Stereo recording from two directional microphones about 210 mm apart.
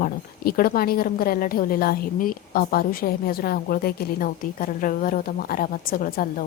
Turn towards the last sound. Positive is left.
turn(degrees=45)  # may be behind; listen again after turning